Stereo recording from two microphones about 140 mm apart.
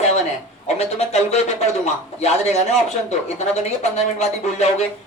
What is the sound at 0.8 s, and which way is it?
Speech, 50° left (ahead or behind).